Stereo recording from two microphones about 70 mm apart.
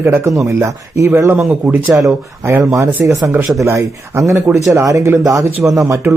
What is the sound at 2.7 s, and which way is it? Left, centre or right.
Speech, right.